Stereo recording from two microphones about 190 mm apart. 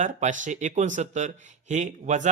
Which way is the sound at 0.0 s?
40° right (ahead or behind).